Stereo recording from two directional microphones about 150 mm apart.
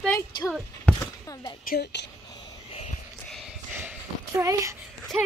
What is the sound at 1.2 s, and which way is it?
Speech, 25° left (ahead or behind).